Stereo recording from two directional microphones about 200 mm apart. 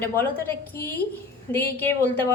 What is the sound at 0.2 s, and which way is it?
A woman's voice, 10° left (ahead or behind).